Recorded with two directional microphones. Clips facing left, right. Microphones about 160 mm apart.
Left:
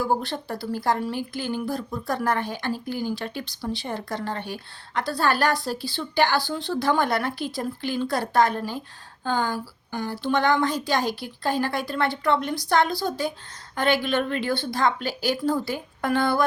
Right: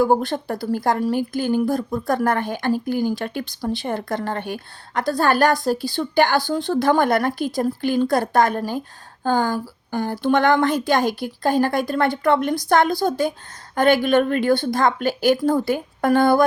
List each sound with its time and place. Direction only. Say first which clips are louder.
0.0 s speech: right 7 dB; 50° right (ahead or behind)